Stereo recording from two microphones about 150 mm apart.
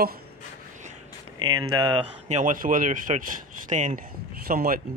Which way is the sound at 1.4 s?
25° right (ahead or behind).